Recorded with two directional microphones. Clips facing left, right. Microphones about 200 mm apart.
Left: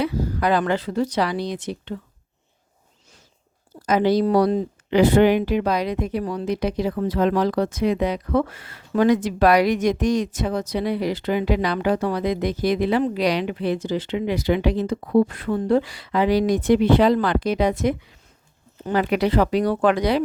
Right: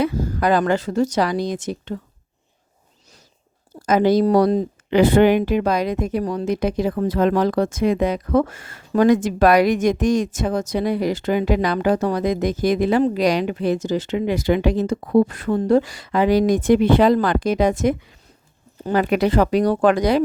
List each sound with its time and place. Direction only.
0.0 s speech: 45° right (ahead or behind)
3.8 s speech: 45° right (ahead or behind)